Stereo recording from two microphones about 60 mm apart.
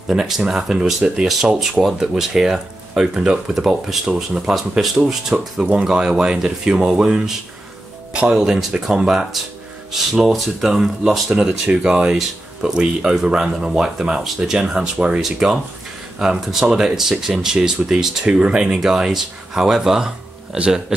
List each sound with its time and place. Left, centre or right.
0.1 s speech: centre
4.6 s speech: centre